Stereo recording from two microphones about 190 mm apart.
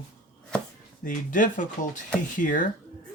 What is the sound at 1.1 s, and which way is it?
Speech, 45° left (ahead or behind).